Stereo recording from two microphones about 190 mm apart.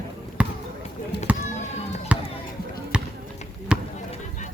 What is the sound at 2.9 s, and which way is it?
Basketball bounce, 5° right (ahead or behind).